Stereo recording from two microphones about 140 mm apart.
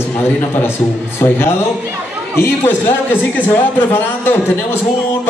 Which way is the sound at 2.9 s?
15° left (ahead or behind).